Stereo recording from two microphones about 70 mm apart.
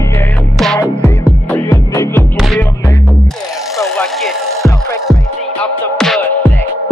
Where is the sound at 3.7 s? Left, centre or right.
Centre.